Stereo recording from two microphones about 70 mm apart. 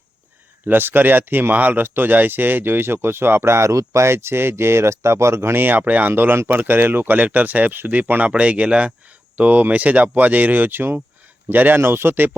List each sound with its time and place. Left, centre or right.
0.6 s speech: right